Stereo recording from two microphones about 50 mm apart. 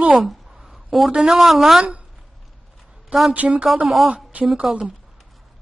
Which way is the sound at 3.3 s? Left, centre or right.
Right.